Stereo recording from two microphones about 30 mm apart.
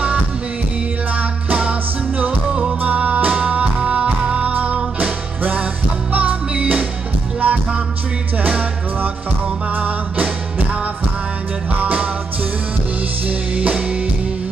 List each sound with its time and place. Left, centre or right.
3.0 s music: right
3.3 s music: right
6.1 s music: right
7.3 s music: right
9.8 s music: right